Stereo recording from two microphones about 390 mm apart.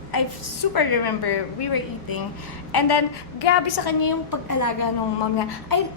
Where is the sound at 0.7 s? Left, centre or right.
Left.